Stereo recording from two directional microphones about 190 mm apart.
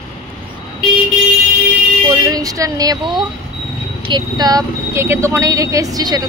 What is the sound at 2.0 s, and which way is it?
Speech, 20° right (ahead or behind).